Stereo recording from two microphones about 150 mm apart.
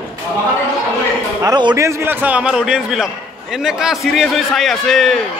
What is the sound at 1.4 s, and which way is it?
Speech, 30° right (ahead or behind).